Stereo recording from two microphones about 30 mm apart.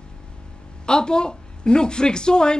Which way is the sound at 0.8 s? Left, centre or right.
Left.